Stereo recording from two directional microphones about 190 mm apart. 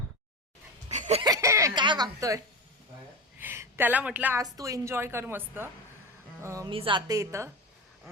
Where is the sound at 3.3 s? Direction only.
10° right (ahead or behind).